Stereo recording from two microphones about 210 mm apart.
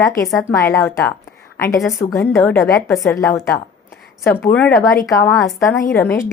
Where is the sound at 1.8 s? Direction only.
Centre (ahead or behind).